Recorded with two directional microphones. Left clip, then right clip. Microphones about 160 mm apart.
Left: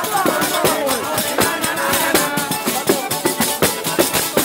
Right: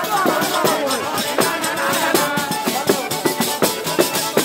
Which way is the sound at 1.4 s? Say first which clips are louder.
Even; 50° left (ahead or behind).